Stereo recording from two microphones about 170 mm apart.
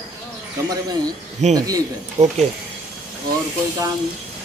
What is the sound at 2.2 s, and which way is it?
Speech, 40° right (ahead or behind).